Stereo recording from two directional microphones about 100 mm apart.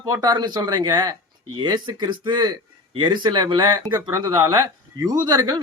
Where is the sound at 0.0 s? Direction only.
40° right (ahead or behind).